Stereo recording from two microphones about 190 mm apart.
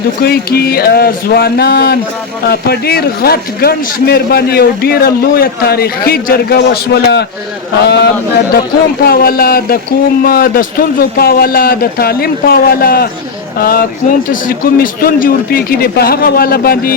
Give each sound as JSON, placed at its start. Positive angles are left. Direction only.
{"t": 0.2, "sound": "a man's voice", "side_deg": 55}